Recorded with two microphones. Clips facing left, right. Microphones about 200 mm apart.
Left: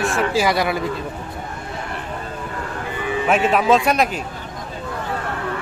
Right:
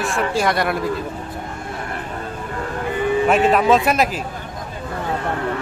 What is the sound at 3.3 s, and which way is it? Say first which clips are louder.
Speech: even; centre (ahead or behind).